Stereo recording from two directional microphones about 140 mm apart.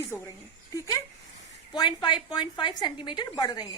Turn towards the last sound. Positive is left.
turn(degrees=30)  # may be behind; listen again after turning